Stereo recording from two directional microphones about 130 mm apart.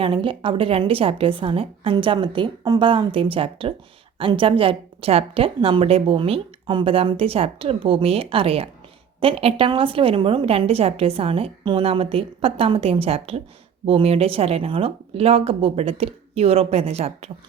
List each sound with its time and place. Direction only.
0.0 s a woman's voice: 45° right (ahead or behind)